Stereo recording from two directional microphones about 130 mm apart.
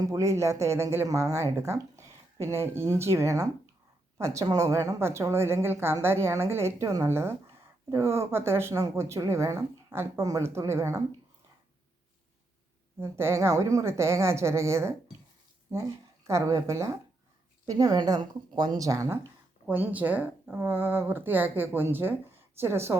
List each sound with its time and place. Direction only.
0.0 s speech: 25° right (ahead or behind)
13.0 s speech: 20° right (ahead or behind)
16.2 s speech: 25° right (ahead or behind)
19.6 s a woman's voice: 15° right (ahead or behind)